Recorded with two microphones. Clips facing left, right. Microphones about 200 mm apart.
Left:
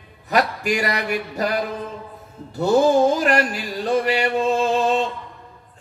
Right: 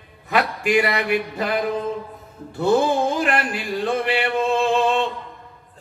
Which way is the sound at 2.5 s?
40° left (ahead or behind).